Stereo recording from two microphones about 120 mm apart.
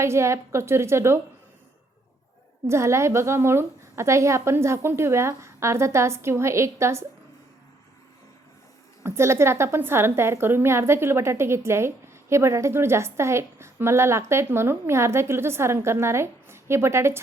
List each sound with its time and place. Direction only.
0.0 s a woman's voice: 25° right (ahead or behind)
2.6 s a woman's voice: 25° right (ahead or behind)
9.0 s a woman's voice: 20° right (ahead or behind)